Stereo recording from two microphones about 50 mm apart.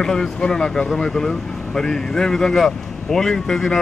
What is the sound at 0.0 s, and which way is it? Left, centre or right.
Speech, centre.